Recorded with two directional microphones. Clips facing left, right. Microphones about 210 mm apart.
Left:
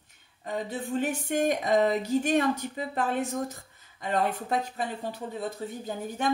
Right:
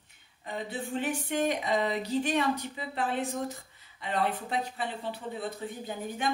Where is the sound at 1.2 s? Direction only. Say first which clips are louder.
Left 3 dB; 45° left (ahead or behind).